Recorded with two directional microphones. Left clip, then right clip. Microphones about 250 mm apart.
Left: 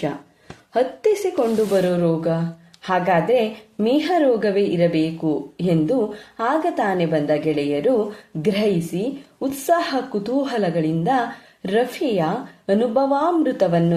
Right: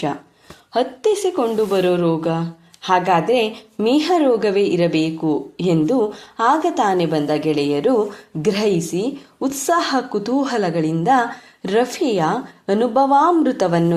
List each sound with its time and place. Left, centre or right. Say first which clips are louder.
0.7 s a woman's voice: right 1 dB; centre